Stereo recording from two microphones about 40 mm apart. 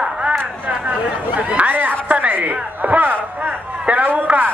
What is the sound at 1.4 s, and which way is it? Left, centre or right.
Chatter, right.